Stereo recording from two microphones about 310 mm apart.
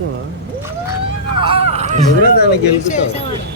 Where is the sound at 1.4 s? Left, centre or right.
Centre.